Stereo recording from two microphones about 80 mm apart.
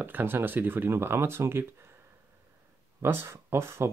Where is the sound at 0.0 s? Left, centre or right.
Right.